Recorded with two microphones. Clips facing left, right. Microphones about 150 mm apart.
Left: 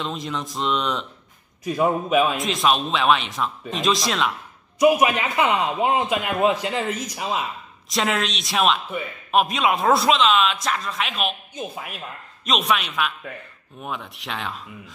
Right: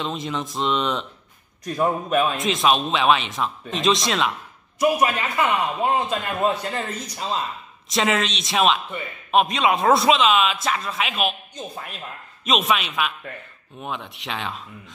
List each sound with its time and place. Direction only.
0.0 s speech: centre (ahead or behind)
4.7 s a man's voice: 15° left (ahead or behind)
7.9 s speech: centre (ahead or behind)
11.5 s a man's voice: 10° left (ahead or behind)